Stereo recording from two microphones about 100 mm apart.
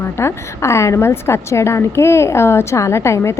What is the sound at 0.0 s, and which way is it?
A woman's voice, 25° left (ahead or behind).